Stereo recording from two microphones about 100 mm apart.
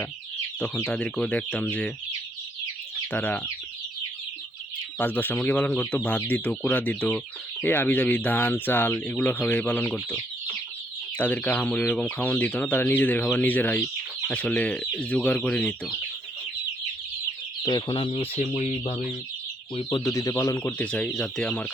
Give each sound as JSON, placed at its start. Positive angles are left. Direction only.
{"t": 0.9, "sound": "speech", "side_deg": 10}
{"t": 3.1, "sound": "speech", "side_deg": 15}
{"t": 4.9, "sound": "speech", "side_deg": 20}
{"t": 11.2, "sound": "speech", "side_deg": 15}
{"t": 17.6, "sound": "speech", "side_deg": 45}
{"t": 20.1, "sound": "speech", "side_deg": 30}
{"t": 20.7, "sound": "speech", "side_deg": 10}